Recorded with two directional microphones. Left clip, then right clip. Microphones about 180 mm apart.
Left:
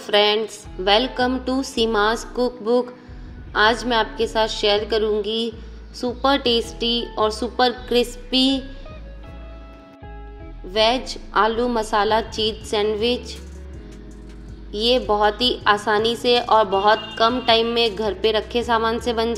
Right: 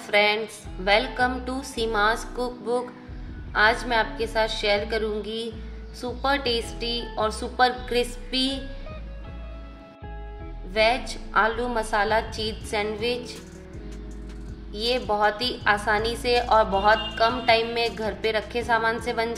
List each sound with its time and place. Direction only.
0.0 s a woman's voice: 25° left (ahead or behind)
10.7 s a woman's voice: 20° left (ahead or behind)
14.7 s a woman's voice: 20° left (ahead or behind)